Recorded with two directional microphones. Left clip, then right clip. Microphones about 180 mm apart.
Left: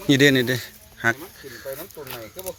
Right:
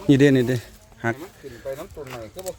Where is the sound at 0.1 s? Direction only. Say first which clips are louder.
Even; 20° right (ahead or behind).